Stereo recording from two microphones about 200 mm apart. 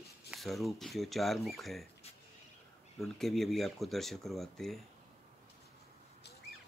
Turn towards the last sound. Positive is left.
turn(degrees=0)  # may be behind; listen again after turning